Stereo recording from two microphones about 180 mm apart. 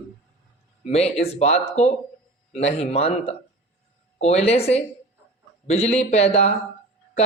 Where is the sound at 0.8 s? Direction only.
35° left (ahead or behind).